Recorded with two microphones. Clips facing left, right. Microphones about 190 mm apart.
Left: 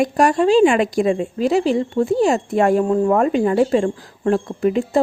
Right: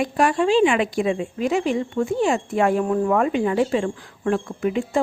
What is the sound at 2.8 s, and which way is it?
Speech, 25° left (ahead or behind).